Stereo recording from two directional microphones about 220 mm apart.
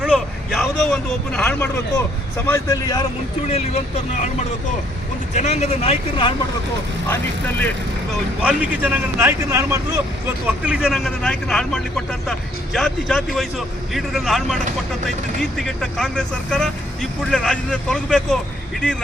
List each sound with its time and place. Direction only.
0.0 s vehicle: centre (ahead or behind)
2.5 s speech: 15° left (ahead or behind)
5.3 s speech: 30° left (ahead or behind)
7.1 s speech: 10° left (ahead or behind)
8.4 s speech: 5° right (ahead or behind)